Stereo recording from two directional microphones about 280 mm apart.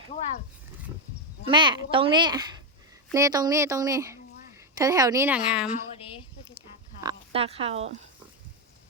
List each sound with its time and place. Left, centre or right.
1.5 s a woman's voice: centre
7.0 s speech: centre